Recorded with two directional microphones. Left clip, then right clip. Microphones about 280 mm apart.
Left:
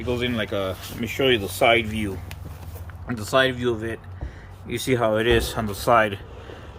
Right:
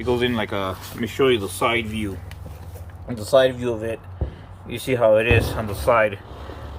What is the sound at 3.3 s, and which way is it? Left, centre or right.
Speech, centre.